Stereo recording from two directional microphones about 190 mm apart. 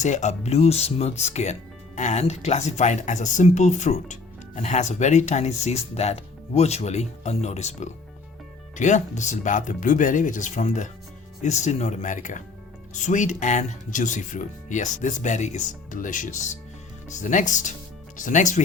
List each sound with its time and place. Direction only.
0.0 s speech: 35° left (ahead or behind)